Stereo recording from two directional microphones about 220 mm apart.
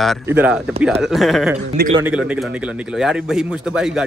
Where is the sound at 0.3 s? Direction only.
5° right (ahead or behind).